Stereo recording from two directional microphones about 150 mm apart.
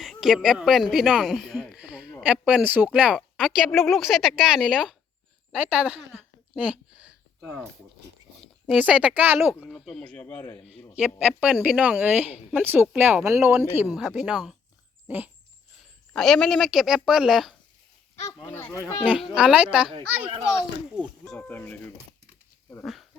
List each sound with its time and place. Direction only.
0.0 s a woman's voice: centre (ahead or behind)
6.6 s a sound: 10° right (ahead or behind)
8.8 s a woman's voice: 10° right (ahead or behind)
9.6 s speech: centre (ahead or behind)
10.9 s a woman's voice: 10° right (ahead or behind)
13.7 s speech: 10° right (ahead or behind)
16.1 s speech: centre (ahead or behind)
18.4 s speech: 15° left (ahead or behind)
19.3 s a woman's voice: 5° right (ahead or behind)
21.3 s speech: 10° left (ahead or behind)
22.8 s speech: centre (ahead or behind)